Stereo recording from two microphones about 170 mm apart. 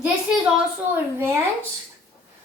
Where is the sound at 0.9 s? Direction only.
15° right (ahead or behind).